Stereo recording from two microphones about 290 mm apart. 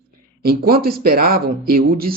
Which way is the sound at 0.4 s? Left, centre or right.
Right.